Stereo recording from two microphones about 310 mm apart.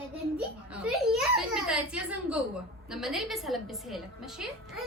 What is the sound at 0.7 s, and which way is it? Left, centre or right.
A woman's voice, centre.